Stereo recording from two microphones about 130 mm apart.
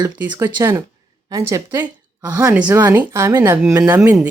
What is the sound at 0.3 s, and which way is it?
A woman's voice, 20° right (ahead or behind).